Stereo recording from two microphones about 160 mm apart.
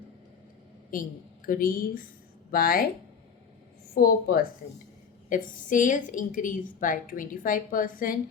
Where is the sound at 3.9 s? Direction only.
65° left (ahead or behind).